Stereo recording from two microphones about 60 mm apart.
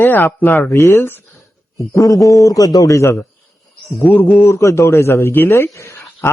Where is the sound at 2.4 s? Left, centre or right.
Left.